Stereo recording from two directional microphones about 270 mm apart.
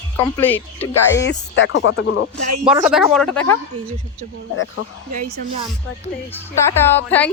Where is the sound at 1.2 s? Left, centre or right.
Left.